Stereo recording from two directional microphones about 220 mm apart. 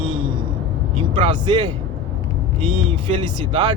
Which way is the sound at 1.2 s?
20° right (ahead or behind).